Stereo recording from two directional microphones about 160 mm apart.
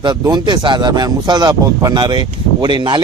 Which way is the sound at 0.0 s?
25° right (ahead or behind).